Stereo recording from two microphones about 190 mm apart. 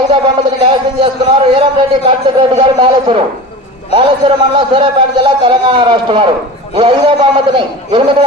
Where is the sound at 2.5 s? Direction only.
25° right (ahead or behind).